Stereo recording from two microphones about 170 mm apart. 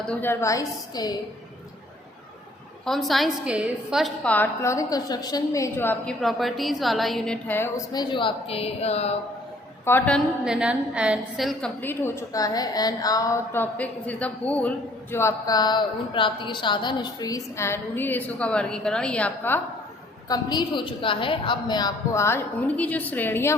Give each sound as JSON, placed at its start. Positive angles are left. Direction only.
{"t": 0.0, "sound": "a woman's voice", "side_deg": 10}
{"t": 2.8, "sound": "a woman's voice", "side_deg": 0}
{"t": 7.9, "sound": "a woman's voice", "side_deg": 30}
{"t": 9.8, "sound": "a woman's voice", "side_deg": 15}
{"t": 10.4, "sound": "a woman's voice", "side_deg": -5}
{"t": 11.8, "sound": "a woman's voice", "side_deg": 15}
{"t": 20.2, "sound": "a woman's voice", "side_deg": 25}